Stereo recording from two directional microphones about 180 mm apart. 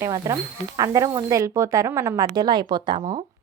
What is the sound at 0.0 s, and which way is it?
A woman's voice, 20° right (ahead or behind).